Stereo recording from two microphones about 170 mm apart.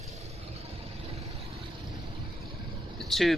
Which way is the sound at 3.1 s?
Centre (ahead or behind).